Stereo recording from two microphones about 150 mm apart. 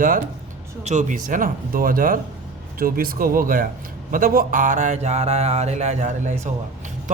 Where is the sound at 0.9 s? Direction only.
55° right (ahead or behind).